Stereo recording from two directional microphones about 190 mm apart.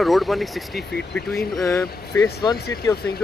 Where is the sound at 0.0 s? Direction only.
Centre (ahead or behind).